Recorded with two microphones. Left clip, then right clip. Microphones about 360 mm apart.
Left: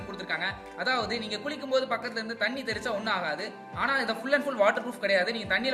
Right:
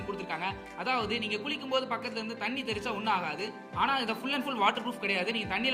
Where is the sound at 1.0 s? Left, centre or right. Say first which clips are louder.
Even; centre.